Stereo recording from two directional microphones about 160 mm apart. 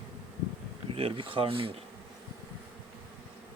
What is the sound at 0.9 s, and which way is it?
Speech, 35° right (ahead or behind).